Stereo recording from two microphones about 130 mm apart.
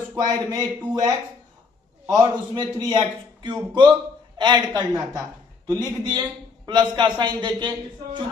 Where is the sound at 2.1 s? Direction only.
35° right (ahead or behind).